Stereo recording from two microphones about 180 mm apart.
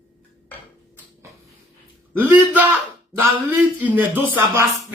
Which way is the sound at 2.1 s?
10° right (ahead or behind).